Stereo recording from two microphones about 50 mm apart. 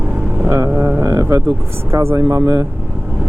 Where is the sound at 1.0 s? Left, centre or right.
Right.